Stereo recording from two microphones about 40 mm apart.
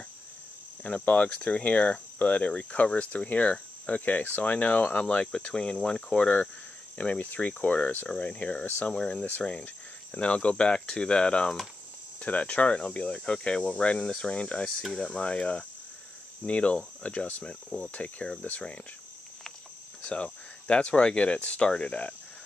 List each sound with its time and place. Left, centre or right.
0.8 s cricket: left
5.5 s speech: left
7.0 s cricket: left
8.8 s speech: left
12.2 s speech: left
16.4 s cricket: left
17.0 s speech: left
17.6 s speech: centre
17.9 s cricket: left
20.0 s speech: left